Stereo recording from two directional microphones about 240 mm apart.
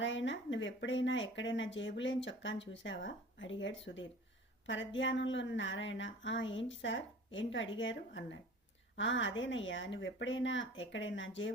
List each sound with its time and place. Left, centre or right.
0.0 s speech: left